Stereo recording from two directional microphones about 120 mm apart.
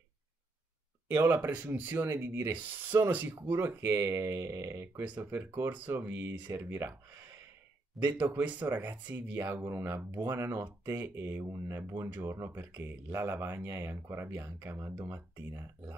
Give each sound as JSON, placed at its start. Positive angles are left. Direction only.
{"t": 1.1, "sound": "speech", "side_deg": -20}